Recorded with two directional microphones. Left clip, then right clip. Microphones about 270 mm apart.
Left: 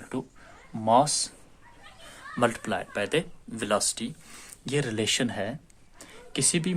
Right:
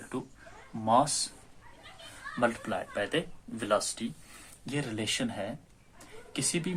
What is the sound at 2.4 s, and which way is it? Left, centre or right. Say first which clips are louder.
Speech: left 4 dB; left.